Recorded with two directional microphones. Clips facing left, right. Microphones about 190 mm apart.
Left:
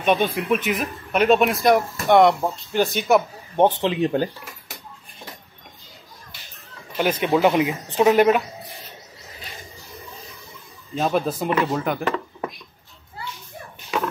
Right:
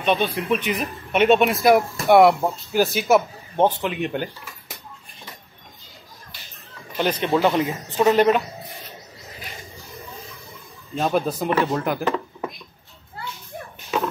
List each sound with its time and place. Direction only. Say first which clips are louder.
0.0 s speech: left 1 dB; 10° left (ahead or behind)
3.5 s speech: left 2 dB; 20° left (ahead or behind)
7.0 s speech: left 1 dB; 10° left (ahead or behind)
11.0 s speech: even; centre (ahead or behind)